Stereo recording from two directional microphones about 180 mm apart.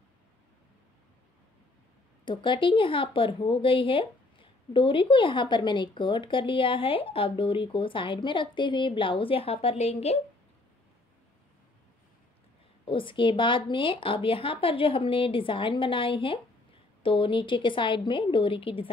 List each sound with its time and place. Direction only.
2.2 s a woman's voice: 25° left (ahead or behind)
12.8 s a woman's voice: 30° left (ahead or behind)